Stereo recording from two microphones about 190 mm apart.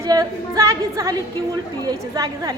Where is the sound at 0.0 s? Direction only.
20° right (ahead or behind).